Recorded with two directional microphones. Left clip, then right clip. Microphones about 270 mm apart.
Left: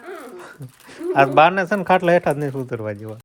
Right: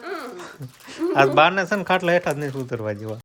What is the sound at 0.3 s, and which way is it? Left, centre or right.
Speech, centre.